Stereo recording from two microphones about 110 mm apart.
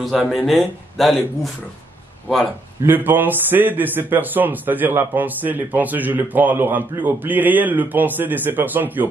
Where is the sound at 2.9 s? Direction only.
15° right (ahead or behind).